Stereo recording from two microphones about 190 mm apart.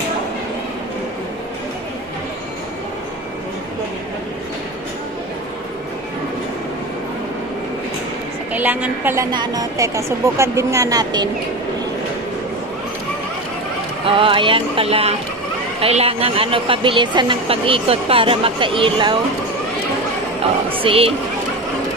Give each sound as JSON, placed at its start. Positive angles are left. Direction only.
{"t": 8.5, "sound": "a woman's voice", "side_deg": -10}
{"t": 14.0, "sound": "a woman's voice", "side_deg": -30}
{"t": 20.7, "sound": "a woman's voice", "side_deg": -30}